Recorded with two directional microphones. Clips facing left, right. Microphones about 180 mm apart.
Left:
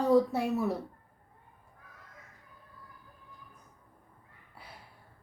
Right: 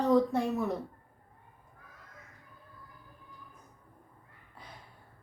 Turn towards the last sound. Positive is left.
turn(degrees=5)  # may be behind; listen again after turning